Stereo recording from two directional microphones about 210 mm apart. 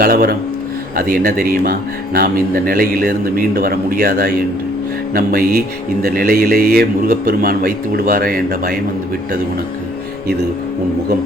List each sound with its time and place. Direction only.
0.0 s speech: 45° right (ahead or behind)